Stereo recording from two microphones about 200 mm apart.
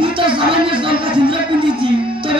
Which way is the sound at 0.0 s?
25° right (ahead or behind).